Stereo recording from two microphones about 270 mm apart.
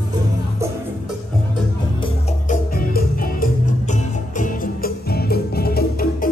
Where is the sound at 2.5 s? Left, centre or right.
Left.